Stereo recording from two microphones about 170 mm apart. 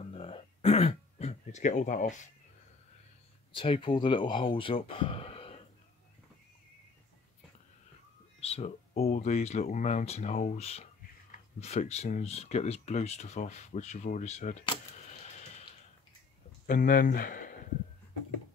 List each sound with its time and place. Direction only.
0.1 s throat clearing: 35° left (ahead or behind)
3.5 s speech: 30° left (ahead or behind)
8.4 s speech: 35° left (ahead or behind)
16.6 s speech: 50° left (ahead or behind)